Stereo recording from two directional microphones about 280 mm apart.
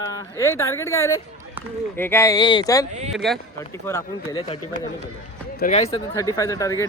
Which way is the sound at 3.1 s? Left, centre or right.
Centre.